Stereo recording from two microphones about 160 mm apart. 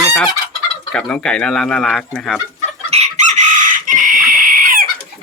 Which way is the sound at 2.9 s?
50° right (ahead or behind).